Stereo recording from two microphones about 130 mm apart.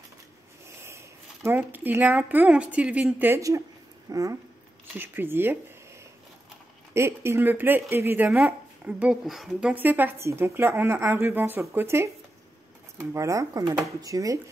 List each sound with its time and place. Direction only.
0.8 s a woman's voice: 20° right (ahead or behind)
6.9 s a woman's voice: 20° right (ahead or behind)
9.2 s a woman's voice: centre (ahead or behind); by 14.4 s 25° right (ahead or behind)